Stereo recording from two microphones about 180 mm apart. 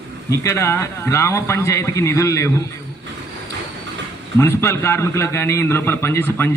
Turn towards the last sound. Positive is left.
turn(degrees=10)  # may be behind; listen again after turning